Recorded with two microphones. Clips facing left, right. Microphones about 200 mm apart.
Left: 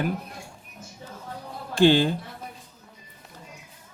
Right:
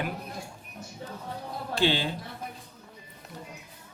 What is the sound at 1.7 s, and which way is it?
Speech, 50° left (ahead or behind).